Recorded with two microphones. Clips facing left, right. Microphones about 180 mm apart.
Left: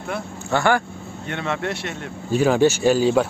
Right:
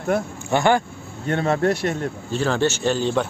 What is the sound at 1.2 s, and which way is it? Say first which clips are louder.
Speech: right 6 dB; 40° right (ahead or behind).